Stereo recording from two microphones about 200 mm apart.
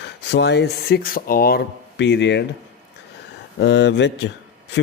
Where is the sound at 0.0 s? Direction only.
60° left (ahead or behind).